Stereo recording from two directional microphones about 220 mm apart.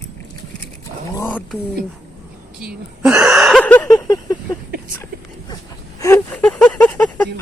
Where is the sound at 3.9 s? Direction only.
15° left (ahead or behind).